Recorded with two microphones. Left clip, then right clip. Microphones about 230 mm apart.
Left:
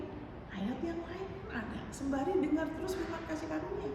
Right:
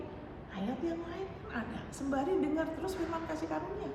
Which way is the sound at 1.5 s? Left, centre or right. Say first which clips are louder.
Right 1 dB; centre.